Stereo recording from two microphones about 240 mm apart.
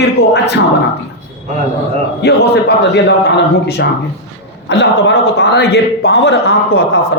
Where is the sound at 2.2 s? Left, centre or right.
Left.